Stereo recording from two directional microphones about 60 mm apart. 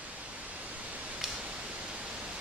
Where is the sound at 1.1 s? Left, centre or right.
Centre.